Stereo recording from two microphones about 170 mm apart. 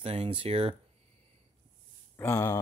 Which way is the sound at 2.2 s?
20° left (ahead or behind).